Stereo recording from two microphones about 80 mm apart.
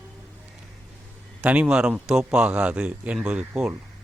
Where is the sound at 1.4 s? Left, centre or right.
Centre.